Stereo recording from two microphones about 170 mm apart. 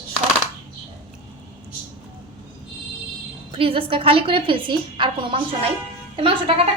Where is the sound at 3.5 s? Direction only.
30° right (ahead or behind).